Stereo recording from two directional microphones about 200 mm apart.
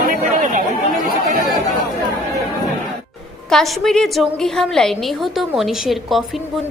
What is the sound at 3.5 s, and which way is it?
A woman's voice, centre (ahead or behind).